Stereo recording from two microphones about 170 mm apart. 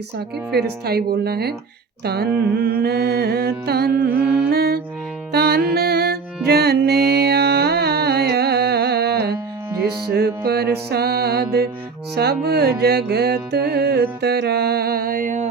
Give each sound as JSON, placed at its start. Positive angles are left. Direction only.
{"t": 0.5, "sound": "music", "side_deg": -65}